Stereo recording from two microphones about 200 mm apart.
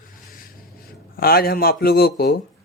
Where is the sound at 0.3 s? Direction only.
45° left (ahead or behind).